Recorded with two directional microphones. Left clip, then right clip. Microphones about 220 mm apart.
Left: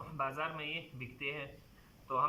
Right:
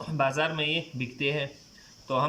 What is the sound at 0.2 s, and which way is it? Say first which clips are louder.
Speech: right 11 dB; 25° right (ahead or behind).